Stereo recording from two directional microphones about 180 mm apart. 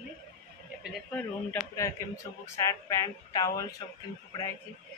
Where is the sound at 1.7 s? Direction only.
15° left (ahead or behind).